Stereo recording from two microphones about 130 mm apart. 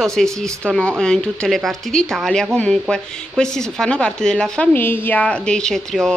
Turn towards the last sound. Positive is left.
turn(degrees=5)  # may be behind; listen again after turning